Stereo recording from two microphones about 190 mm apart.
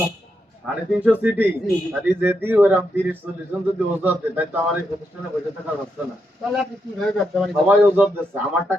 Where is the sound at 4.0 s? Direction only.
10° right (ahead or behind).